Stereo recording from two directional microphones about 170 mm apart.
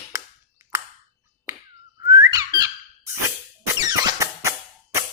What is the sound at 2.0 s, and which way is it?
Whistling, 15° right (ahead or behind).